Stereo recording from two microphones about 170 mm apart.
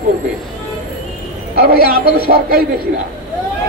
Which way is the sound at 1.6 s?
60° right (ahead or behind).